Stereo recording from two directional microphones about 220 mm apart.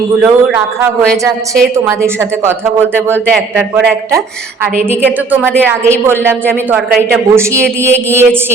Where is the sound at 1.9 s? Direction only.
10° right (ahead or behind).